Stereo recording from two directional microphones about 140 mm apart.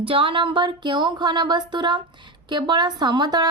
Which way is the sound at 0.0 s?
40° right (ahead or behind).